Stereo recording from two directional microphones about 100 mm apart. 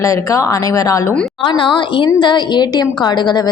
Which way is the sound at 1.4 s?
55° left (ahead or behind).